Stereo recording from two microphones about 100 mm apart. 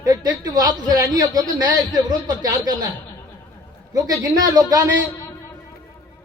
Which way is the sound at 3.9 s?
40° right (ahead or behind).